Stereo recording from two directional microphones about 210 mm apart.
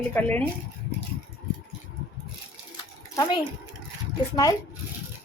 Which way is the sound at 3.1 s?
20° left (ahead or behind).